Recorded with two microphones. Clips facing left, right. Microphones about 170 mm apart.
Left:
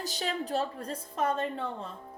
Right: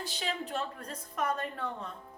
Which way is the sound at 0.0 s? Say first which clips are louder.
Left 3 dB; 40° left (ahead or behind).